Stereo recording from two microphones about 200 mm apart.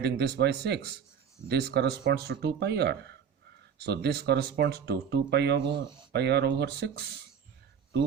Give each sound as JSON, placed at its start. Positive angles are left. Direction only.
{"t": 0.0, "sound": "speech", "side_deg": -55}
{"t": 5.6, "sound": "speech", "side_deg": -25}
{"t": 6.1, "sound": "speech", "side_deg": -55}